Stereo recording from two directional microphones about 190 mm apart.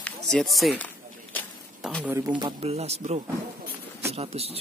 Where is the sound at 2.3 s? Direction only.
30° right (ahead or behind).